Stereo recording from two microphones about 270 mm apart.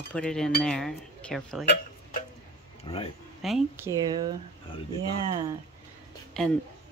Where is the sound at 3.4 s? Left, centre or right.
Centre.